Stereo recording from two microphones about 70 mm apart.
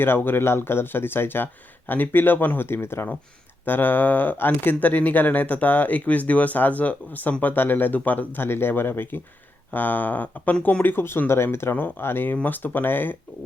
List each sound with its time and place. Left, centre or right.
0.0 s speech: left